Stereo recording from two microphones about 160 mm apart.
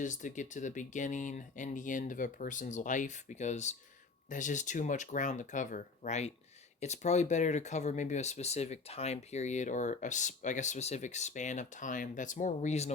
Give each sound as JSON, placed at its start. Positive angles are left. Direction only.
{"t": 0.0, "sound": "speech", "side_deg": 50}